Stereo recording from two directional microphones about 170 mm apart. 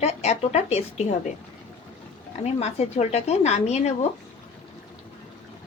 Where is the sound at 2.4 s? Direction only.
40° left (ahead or behind).